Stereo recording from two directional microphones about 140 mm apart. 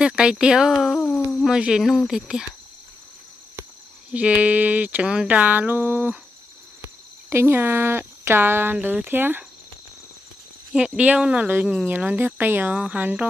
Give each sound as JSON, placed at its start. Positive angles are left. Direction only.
{"t": 0.0, "sound": "speech", "side_deg": -5}
{"t": 4.4, "sound": "speech", "side_deg": -10}
{"t": 7.2, "sound": "speech", "side_deg": -20}
{"t": 10.7, "sound": "speech", "side_deg": -10}